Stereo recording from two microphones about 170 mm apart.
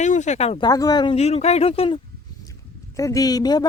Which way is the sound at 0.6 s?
20° left (ahead or behind).